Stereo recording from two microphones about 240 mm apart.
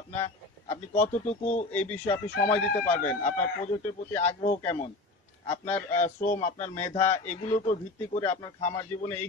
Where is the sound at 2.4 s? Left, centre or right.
Left.